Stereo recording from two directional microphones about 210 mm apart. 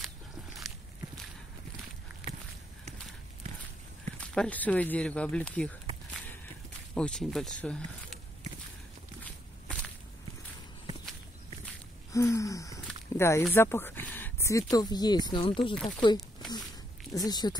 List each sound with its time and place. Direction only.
0.0 s walk: centre (ahead or behind)
2.2 s a sound: 5° right (ahead or behind)
4.2 s speech: 5° left (ahead or behind)
7.0 s speech: 5° left (ahead or behind)
12.1 s speech: 15° left (ahead or behind)
13.4 s a sound: 10° left (ahead or behind)
14.7 s speech: 20° left (ahead or behind)
16.2 s a sound: centre (ahead or behind)
17.1 s speech: 20° left (ahead or behind)